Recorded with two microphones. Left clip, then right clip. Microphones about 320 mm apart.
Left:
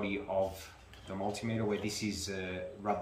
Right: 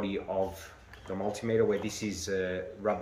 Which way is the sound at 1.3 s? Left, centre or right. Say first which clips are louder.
Right 8 dB; centre.